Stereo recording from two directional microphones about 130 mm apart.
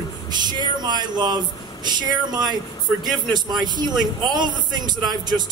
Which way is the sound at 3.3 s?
35° right (ahead or behind).